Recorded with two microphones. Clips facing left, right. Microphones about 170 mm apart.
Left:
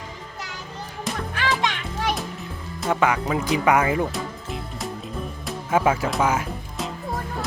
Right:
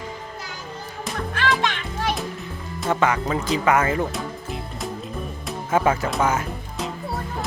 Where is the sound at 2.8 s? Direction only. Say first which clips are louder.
Even; 10° left (ahead or behind).